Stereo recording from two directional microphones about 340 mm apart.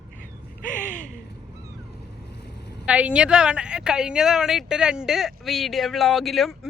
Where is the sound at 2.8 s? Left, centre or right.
Centre.